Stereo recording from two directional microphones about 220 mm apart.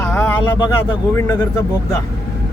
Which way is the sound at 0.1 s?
10° left (ahead or behind).